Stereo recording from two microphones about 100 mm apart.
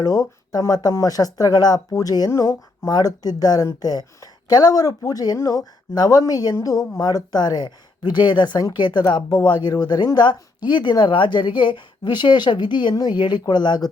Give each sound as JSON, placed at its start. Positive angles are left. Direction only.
{"t": 0.0, "sound": "a woman's voice", "side_deg": 40}